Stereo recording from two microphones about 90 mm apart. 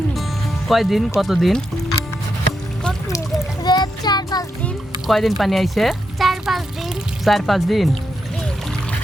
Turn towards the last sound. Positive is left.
turn(degrees=0)  # may be behind; listen again after turning